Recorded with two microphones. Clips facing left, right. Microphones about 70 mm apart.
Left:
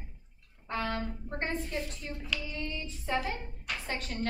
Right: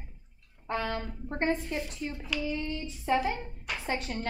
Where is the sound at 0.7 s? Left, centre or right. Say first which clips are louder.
Right 2 dB; right.